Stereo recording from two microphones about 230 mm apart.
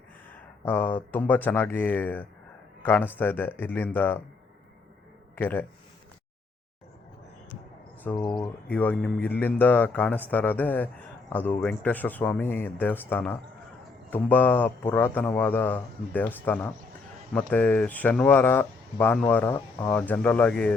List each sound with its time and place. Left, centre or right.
0.6 s speech: centre
5.4 s speech: centre
8.1 s speech: left
8.6 s speech: centre